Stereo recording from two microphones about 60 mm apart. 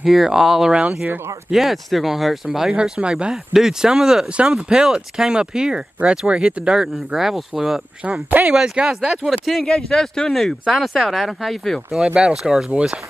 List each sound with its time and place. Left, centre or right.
0.0 s speech: centre
0.7 s speech: right
1.5 s speech: centre
2.7 s speech: centre
8.0 s speech: right
9.2 s speech: centre
12.3 s speech: centre
12.7 s speech: centre